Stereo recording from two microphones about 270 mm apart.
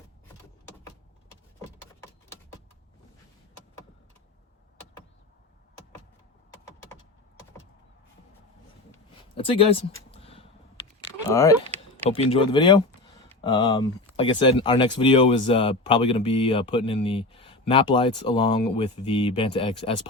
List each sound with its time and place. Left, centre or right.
9.3 s speech: centre
10.1 s a sound: left
11.3 s speech: centre
12.0 s speech: left